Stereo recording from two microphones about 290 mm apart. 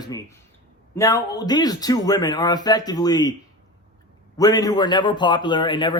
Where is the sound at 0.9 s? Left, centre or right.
Centre.